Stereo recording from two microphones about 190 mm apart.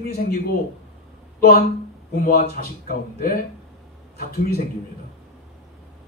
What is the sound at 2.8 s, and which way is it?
A man's voice, 50° left (ahead or behind).